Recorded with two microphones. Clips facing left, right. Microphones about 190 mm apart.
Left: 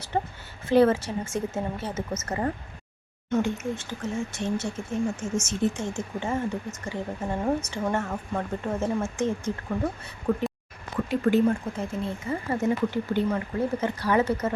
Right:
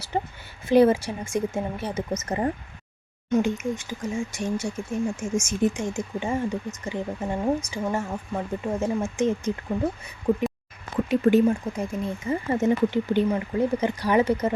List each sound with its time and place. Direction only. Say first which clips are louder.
0.7 s speech: right 2 dB; 15° right (ahead or behind)